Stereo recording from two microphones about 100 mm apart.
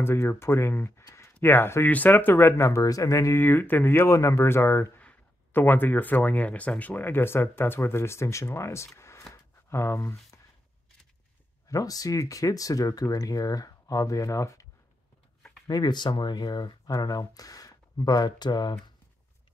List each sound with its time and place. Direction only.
0.0 s speech: 25° left (ahead or behind)
9.3 s a sound: 25° left (ahead or behind)
11.7 s speech: 35° left (ahead or behind)
15.6 s speech: 40° left (ahead or behind)